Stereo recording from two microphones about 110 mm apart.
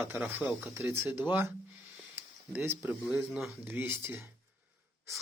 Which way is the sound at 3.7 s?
20° right (ahead or behind).